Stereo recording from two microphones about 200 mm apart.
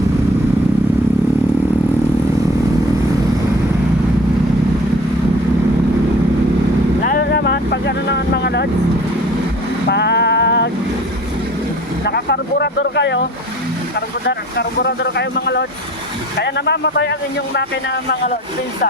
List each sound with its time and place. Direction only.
7.0 s boat: 45° left (ahead or behind)
9.9 s a sound: 55° left (ahead or behind)
12.0 s vehicle: 55° left (ahead or behind)
14.3 s vehicle: 60° left (ahead or behind)
16.4 s a man's voice: 55° left (ahead or behind)